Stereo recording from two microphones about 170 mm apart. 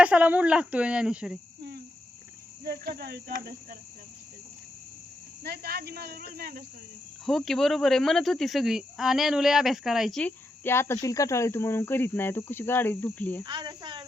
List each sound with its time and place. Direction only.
0.0 s speech: 10° right (ahead or behind)
2.6 s cricket: 60° right (ahead or behind)
5.4 s speech: 70° right (ahead or behind)
7.3 s speech: centre (ahead or behind)
13.4 s speech: 25° right (ahead or behind)